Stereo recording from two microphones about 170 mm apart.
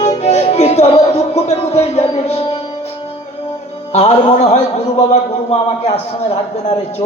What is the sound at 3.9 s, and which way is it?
Speech, 40° left (ahead or behind).